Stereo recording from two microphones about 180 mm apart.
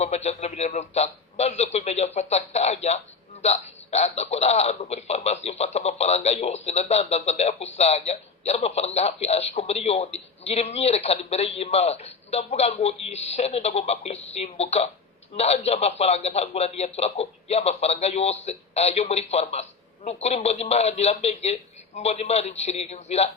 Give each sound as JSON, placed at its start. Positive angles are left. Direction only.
{"t": 0.0, "sound": "a man's voice", "side_deg": 35}